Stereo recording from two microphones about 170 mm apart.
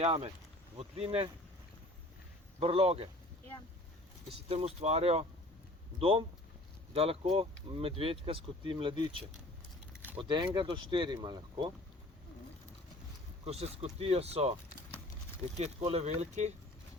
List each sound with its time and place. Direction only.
0.0 s speech: 35° right (ahead or behind)
2.6 s speech: 35° right (ahead or behind)
4.3 s speech: 35° right (ahead or behind)
10.2 s speech: 25° right (ahead or behind)
13.4 s speech: 40° right (ahead or behind)
15.5 s speech: 40° right (ahead or behind)